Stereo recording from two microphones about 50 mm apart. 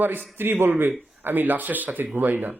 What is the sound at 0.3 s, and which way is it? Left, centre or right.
A man's voice, right.